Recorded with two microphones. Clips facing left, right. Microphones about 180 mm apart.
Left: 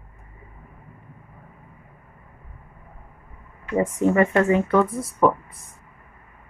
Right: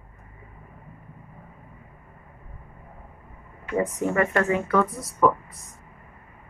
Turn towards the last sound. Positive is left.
turn(degrees=25)  # may be behind; listen again after turning